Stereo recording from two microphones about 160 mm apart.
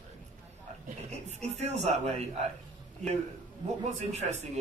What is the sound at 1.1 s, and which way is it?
Speech, 45° right (ahead or behind).